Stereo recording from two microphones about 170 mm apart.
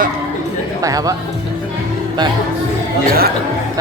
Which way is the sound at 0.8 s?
20° right (ahead or behind).